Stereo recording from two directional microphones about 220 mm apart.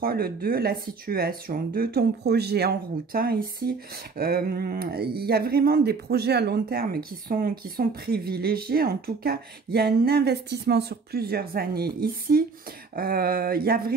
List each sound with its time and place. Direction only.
0.0 s speech: 45° right (ahead or behind)